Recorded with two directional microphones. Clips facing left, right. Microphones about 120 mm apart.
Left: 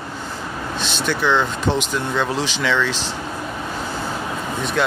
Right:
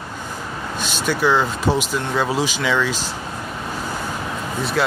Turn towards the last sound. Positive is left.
turn(degrees=-5)  # may be behind; listen again after turning